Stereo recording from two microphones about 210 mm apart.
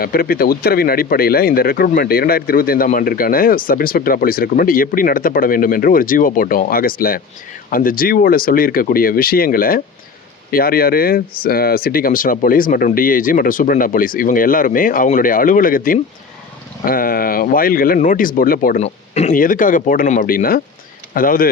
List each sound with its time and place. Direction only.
0.0 s speech: 45° left (ahead or behind)
18.8 s a man's voice: 30° left (ahead or behind)